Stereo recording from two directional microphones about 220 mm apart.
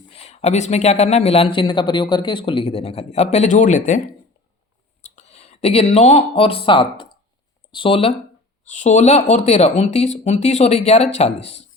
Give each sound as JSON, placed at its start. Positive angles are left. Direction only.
{"t": 0.1, "sound": "speech", "side_deg": 30}
{"t": 5.0, "sound": "speech", "side_deg": 30}